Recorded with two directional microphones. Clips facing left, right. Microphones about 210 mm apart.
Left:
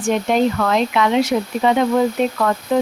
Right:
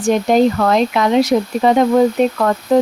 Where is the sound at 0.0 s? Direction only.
40° right (ahead or behind).